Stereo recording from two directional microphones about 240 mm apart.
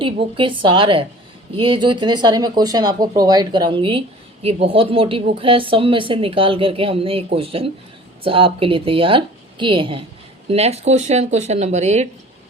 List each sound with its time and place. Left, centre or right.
0.0 s speech: right